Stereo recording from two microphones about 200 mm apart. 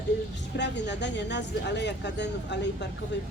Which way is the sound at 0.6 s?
60° left (ahead or behind).